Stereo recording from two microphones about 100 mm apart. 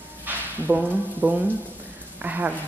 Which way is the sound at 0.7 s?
15° right (ahead or behind).